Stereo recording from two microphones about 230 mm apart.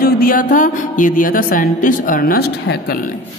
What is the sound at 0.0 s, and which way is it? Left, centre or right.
Speech, left.